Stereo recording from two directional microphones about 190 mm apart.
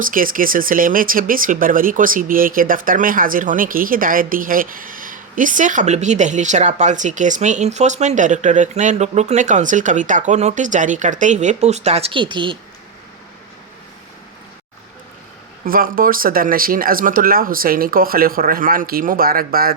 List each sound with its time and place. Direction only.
0.0 s speech: 45° right (ahead or behind); by 12.5 s 25° right (ahead or behind)
15.6 s speech: 50° right (ahead or behind)